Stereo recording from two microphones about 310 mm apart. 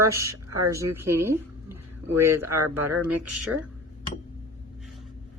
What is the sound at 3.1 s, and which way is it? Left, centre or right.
Speech, right.